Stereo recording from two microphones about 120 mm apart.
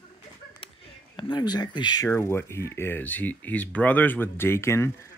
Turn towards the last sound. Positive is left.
turn(degrees=20)  # may be behind; listen again after turning